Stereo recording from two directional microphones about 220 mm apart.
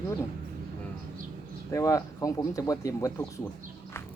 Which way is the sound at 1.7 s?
15° left (ahead or behind).